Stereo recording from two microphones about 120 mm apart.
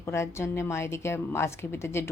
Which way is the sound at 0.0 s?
20° left (ahead or behind).